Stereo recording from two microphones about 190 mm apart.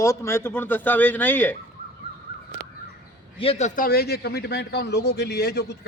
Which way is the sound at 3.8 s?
55° left (ahead or behind).